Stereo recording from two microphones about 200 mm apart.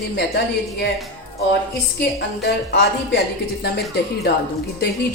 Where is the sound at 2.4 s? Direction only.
55° left (ahead or behind).